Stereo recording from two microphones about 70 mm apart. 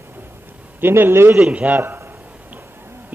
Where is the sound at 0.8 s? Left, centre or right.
Right.